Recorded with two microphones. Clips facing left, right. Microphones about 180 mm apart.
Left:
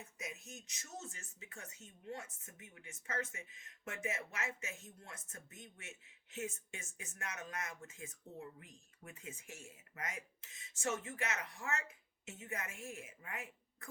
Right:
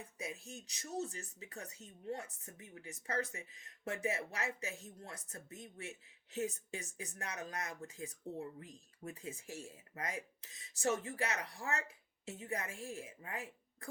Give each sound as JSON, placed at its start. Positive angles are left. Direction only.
{"t": 0.2, "sound": "speech", "side_deg": -30}